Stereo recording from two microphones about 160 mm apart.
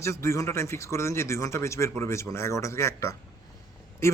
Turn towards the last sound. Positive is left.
turn(degrees=15)  # may be behind; listen again after turning